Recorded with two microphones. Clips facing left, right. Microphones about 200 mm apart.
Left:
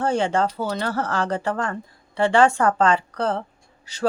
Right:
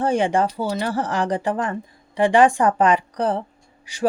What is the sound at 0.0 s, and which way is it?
A woman's voice, 15° right (ahead or behind).